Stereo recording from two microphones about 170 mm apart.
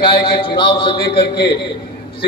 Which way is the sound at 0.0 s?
30° left (ahead or behind).